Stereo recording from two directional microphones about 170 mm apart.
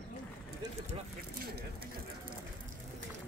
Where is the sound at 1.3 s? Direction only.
65° right (ahead or behind).